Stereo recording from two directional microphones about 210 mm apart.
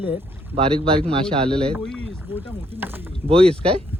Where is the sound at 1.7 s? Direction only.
5° left (ahead or behind).